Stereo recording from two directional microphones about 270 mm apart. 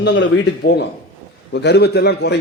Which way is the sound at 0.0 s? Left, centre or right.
Left.